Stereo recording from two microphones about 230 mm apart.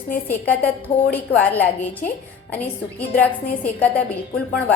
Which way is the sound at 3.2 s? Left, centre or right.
Centre.